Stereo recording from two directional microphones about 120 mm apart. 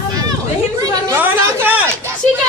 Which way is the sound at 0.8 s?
35° right (ahead or behind).